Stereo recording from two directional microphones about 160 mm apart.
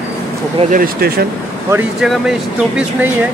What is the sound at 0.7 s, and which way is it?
Speech, 65° right (ahead or behind).